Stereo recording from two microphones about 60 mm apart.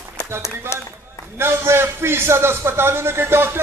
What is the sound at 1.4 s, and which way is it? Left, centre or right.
Music, right.